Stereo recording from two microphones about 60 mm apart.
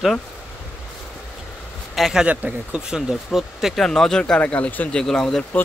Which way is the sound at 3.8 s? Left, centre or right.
Centre.